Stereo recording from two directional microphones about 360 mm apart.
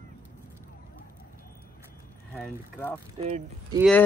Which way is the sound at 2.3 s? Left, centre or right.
Centre.